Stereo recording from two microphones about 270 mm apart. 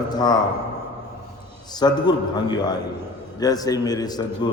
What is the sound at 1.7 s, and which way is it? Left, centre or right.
Mantra, centre.